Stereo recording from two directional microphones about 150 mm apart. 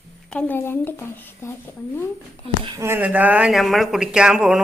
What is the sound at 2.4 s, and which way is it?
Speech, 35° right (ahead or behind).